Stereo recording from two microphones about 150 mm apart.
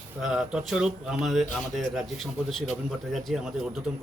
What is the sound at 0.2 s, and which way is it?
Speech, 5° right (ahead or behind).